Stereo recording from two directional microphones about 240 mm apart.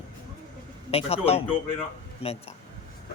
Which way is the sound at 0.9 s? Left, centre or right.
Left.